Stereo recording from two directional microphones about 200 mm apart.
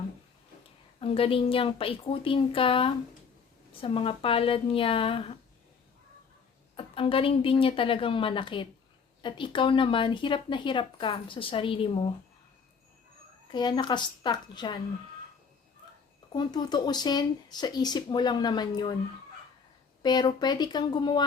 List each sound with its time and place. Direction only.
0.9 s speech: 25° left (ahead or behind)
6.7 s speech: 25° left (ahead or behind)
13.5 s speech: 20° left (ahead or behind)
16.3 s speech: 20° left (ahead or behind)
20.0 s speech: 20° left (ahead or behind)